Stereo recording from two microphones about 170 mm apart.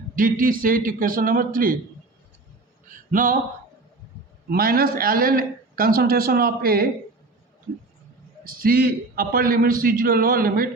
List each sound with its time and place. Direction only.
0.2 s a man's voice: 55° right (ahead or behind)
2.9 s a sound: 55° right (ahead or behind)
4.4 s a man's voice: 60° right (ahead or behind)
8.4 s a man's voice: 60° right (ahead or behind)